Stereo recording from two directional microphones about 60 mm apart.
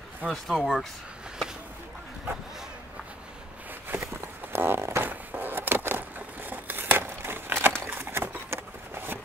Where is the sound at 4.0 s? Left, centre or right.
Right.